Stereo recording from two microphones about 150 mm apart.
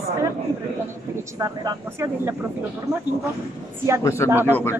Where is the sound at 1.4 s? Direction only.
25° right (ahead or behind).